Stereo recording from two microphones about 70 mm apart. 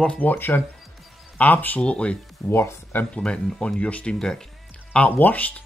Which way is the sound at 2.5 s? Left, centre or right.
Left.